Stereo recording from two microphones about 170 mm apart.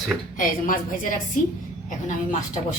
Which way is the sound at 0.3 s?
50° left (ahead or behind).